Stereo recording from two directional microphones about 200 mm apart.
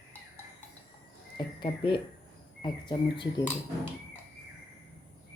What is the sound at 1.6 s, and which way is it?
Speech, 25° left (ahead or behind).